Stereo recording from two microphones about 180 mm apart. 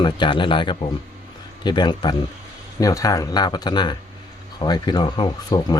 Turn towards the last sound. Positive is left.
turn(degrees=25)  # may be behind; listen again after turning